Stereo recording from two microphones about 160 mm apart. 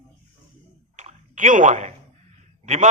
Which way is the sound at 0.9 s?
50° right (ahead or behind).